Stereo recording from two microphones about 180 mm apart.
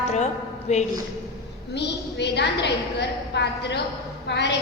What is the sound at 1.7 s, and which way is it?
A woman's voice, 70° left (ahead or behind).